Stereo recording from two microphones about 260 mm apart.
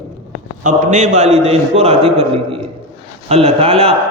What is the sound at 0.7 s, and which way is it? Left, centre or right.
A man's voice, right.